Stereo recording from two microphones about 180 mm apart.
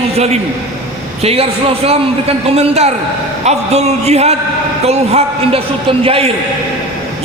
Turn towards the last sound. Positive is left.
turn(degrees=-30)  # may be behind; listen again after turning